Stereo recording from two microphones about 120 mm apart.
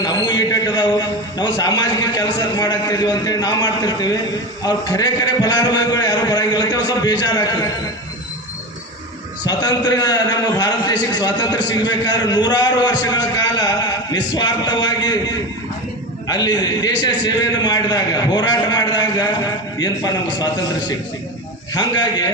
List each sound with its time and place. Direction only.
0.0 s a man's voice: 35° left (ahead or behind)
9.5 s a man's voice: 35° left (ahead or behind)